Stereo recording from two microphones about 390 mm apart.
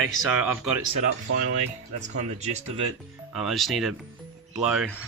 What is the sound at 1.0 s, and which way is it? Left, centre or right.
Speech, right.